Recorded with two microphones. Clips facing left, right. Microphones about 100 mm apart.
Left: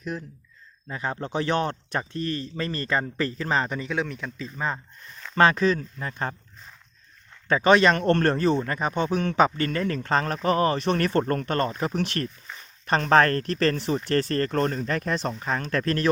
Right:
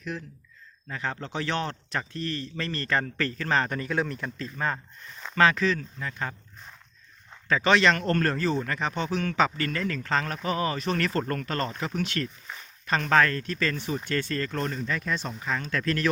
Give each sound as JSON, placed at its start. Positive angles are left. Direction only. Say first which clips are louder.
{"t": 0.9, "sound": "a man's voice", "louder": "left 3 dB", "side_deg": 20}
{"t": 5.3, "sound": "speech", "louder": "left 3 dB", "side_deg": 35}
{"t": 7.4, "sound": "speech", "louder": "left 3 dB", "side_deg": 35}
{"t": 10.8, "sound": "speech", "louder": "left 4 dB", "side_deg": 30}
{"t": 13.8, "sound": "speech", "louder": "left 5 dB", "side_deg": 35}